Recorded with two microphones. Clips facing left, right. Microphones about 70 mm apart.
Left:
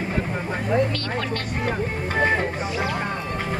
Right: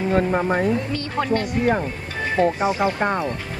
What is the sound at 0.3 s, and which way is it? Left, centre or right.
Speech, right.